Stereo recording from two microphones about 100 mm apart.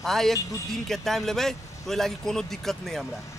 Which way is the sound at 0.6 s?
5° left (ahead or behind).